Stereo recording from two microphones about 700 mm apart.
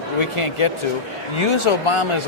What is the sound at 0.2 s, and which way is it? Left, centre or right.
A man's voice, left.